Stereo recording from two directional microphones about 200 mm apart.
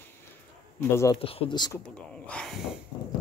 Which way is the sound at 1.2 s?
30° left (ahead or behind).